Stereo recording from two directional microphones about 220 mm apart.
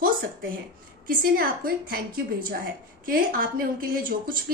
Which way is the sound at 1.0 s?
40° right (ahead or behind).